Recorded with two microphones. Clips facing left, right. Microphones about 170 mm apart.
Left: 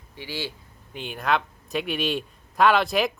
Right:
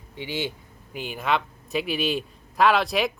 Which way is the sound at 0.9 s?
Centre (ahead or behind).